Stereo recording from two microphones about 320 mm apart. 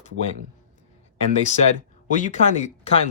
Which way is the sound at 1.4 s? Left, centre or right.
Left.